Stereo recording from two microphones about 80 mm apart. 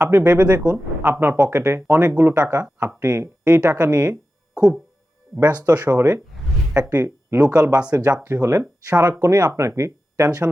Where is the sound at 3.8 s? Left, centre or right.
Right.